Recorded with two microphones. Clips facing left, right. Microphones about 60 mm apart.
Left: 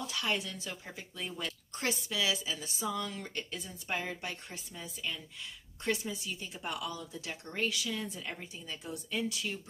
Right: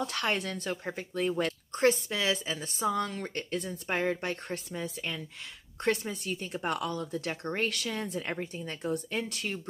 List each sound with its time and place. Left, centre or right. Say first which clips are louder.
0.0 s speech: right 4 dB; right